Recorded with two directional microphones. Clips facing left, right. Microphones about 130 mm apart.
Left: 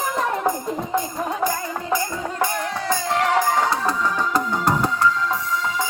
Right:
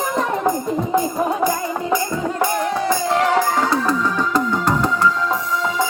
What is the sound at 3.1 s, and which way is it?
Music, 30° right (ahead or behind).